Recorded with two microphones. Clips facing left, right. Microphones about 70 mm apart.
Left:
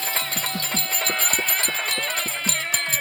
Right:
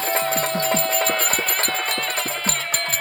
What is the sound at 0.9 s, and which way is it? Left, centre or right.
Music, centre.